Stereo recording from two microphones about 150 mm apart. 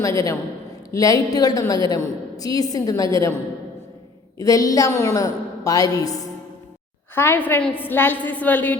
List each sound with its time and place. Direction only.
0.0 s a woman's voice: 20° left (ahead or behind)
4.4 s a woman's voice: 25° left (ahead or behind)
7.2 s a woman's voice: 10° left (ahead or behind)